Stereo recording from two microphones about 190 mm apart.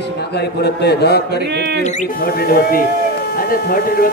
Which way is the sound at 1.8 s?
40° left (ahead or behind).